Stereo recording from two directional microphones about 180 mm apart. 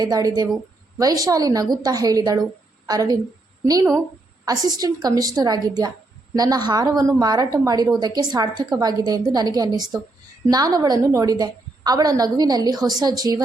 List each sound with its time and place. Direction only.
0.0 s a woman's voice: 20° right (ahead or behind)
4.4 s a woman's voice: 20° right (ahead or behind)